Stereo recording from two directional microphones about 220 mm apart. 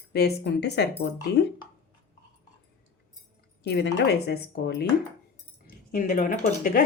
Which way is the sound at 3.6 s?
50° left (ahead or behind).